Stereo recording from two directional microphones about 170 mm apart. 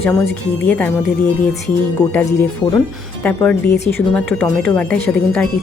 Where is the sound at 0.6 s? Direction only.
10° left (ahead or behind).